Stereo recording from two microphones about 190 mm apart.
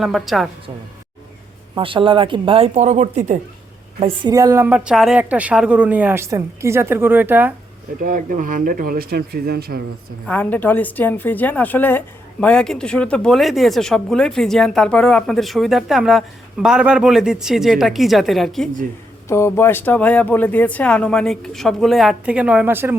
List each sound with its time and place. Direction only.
0.0 s a woman's voice: centre (ahead or behind)
1.7 s speech: 25° right (ahead or behind)
4.0 s a woman's voice: 20° right (ahead or behind)
8.0 s speech: 45° right (ahead or behind)
10.2 s a woman's voice: 10° left (ahead or behind)
19.3 s a woman's voice: 15° left (ahead or behind); by 23.0 s 10° right (ahead or behind)